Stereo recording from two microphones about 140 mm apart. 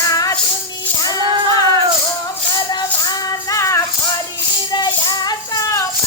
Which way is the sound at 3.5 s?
20° left (ahead or behind).